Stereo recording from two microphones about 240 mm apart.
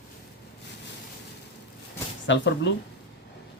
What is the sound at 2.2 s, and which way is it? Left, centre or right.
Speech, left.